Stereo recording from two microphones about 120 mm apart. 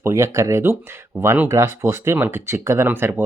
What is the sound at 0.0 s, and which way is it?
Speech, 20° right (ahead or behind).